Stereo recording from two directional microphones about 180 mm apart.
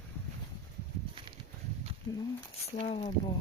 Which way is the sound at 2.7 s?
35° left (ahead or behind).